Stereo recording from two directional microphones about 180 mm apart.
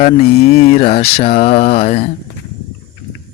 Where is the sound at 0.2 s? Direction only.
35° left (ahead or behind).